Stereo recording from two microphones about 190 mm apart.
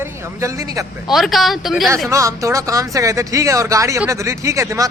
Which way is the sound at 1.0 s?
Centre (ahead or behind).